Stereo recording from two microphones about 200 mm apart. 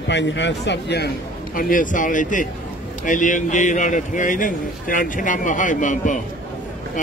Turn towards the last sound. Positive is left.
turn(degrees=40)  # may be behind; listen again after turning